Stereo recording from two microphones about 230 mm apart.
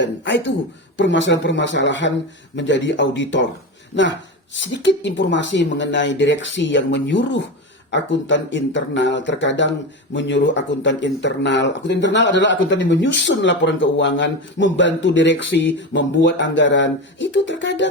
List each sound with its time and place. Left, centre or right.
0.0 s speech: left